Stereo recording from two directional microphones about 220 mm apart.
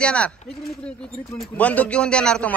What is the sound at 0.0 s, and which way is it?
Speech, 5° left (ahead or behind).